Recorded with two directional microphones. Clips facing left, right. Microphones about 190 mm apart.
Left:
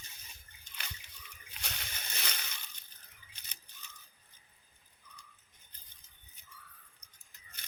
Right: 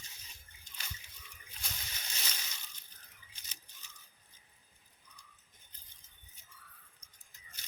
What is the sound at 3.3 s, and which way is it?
Scissors, 60° left (ahead or behind).